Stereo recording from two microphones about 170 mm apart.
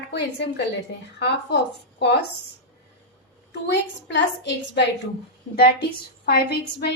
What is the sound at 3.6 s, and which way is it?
A woman's voice, 85° left.